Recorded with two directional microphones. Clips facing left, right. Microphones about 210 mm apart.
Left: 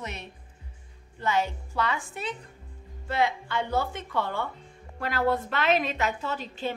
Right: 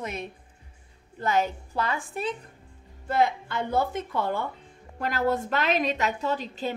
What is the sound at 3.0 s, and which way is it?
A woman's voice, 50° right (ahead or behind).